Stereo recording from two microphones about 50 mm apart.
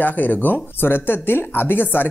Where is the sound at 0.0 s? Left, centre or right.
Left.